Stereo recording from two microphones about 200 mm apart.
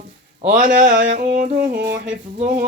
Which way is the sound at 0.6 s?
40° right (ahead or behind).